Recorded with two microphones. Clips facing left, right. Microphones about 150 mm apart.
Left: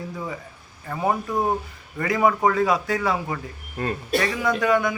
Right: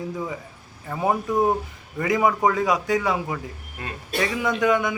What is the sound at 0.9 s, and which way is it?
Speech, 10° right (ahead or behind).